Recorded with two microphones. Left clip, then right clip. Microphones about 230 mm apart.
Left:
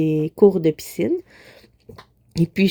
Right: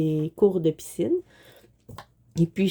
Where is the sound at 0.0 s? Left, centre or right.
Left.